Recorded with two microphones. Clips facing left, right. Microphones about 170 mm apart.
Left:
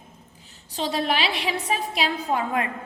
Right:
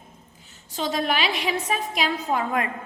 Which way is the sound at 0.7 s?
35° left (ahead or behind).